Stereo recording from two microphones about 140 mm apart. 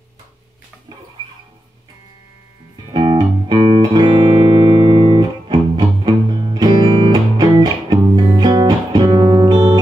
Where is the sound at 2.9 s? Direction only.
30° right (ahead or behind).